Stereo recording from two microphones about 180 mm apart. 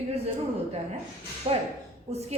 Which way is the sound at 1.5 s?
35° right (ahead or behind).